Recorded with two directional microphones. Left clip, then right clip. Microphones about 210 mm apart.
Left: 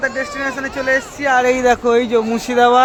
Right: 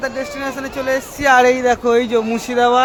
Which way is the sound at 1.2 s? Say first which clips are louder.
Right 5 dB; 45° right (ahead or behind).